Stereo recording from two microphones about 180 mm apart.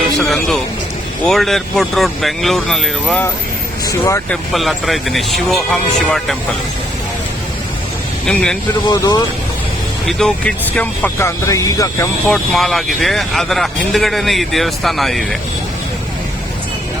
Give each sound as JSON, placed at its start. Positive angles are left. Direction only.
{"t": 0.2, "sound": "speech", "side_deg": 0}
{"t": 4.5, "sound": "speech", "side_deg": 0}
{"t": 8.3, "sound": "speech", "side_deg": 5}
{"t": 8.9, "sound": "speech", "side_deg": 25}
{"t": 10.1, "sound": "speech", "side_deg": 0}
{"t": 12.3, "sound": "speech", "side_deg": 0}